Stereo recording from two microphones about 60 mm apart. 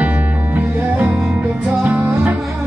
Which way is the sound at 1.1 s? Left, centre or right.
Centre.